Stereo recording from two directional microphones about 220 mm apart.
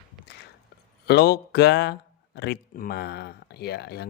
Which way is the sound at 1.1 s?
45° left (ahead or behind).